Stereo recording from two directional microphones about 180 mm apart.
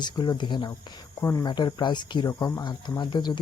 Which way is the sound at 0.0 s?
25° left (ahead or behind).